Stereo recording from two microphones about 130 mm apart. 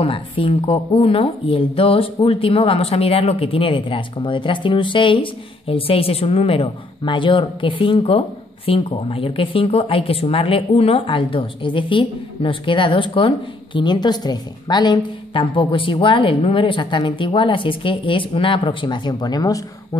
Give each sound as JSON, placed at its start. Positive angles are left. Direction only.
{"t": 0.0, "sound": "a woman's voice", "side_deg": 45}